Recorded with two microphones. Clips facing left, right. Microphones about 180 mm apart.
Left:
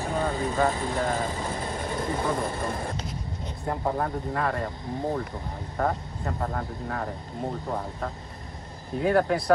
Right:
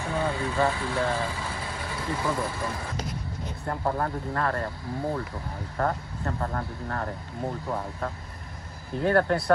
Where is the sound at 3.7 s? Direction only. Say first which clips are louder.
Left 1 dB; 5° left (ahead or behind).